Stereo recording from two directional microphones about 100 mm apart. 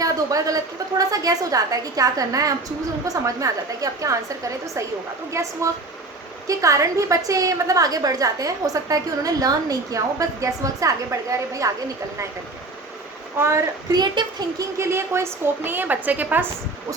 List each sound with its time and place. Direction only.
0.0 s a woman's voice: 35° right (ahead or behind)
13.9 s a child's voice: 45° right (ahead or behind)
14.8 s a woman's voice: 25° right (ahead or behind)